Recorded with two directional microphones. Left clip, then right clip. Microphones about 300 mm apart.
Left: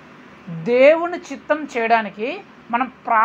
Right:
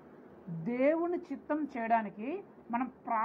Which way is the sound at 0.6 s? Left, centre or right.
Centre.